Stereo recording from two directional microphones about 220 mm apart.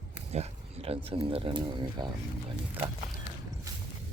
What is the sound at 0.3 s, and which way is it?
Speech, 30° right (ahead or behind).